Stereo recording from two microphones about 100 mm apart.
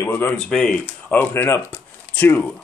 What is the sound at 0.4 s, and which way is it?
Speech, 5° left (ahead or behind).